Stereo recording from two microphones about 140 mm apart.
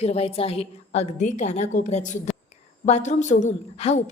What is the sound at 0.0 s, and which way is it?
A woman's voice, 45° left (ahead or behind).